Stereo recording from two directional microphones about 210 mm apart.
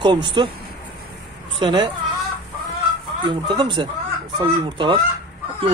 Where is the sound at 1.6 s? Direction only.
20° right (ahead or behind).